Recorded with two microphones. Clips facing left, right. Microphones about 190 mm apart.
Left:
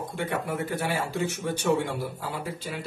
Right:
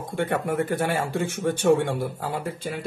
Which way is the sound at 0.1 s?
50° right (ahead or behind).